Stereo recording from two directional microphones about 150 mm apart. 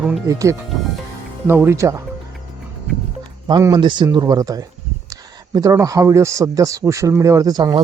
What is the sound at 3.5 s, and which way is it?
A man's voice, 30° right (ahead or behind).